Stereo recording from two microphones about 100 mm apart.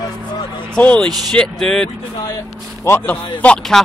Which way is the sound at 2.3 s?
30° left (ahead or behind).